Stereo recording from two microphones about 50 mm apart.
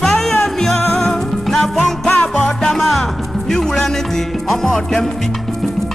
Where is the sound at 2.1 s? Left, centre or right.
Left.